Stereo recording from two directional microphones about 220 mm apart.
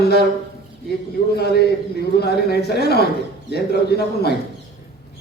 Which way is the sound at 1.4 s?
45° left (ahead or behind).